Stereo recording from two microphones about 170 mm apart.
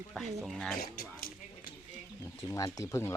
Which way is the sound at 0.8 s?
60° left (ahead or behind).